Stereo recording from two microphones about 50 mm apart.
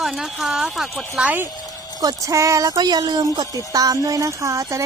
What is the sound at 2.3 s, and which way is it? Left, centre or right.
Speech, right.